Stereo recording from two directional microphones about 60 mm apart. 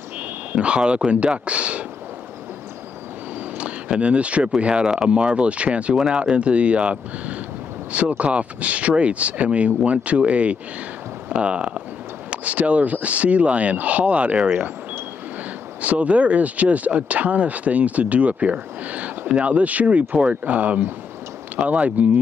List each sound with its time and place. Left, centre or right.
0.6 s speech: centre
3.5 s a sound: centre
4.6 s speech: centre
15.8 s speech: right